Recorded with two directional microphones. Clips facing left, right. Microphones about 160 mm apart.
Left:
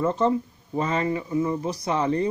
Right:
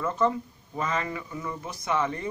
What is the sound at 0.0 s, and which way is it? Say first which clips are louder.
Speech: left 4 dB; 30° left (ahead or behind).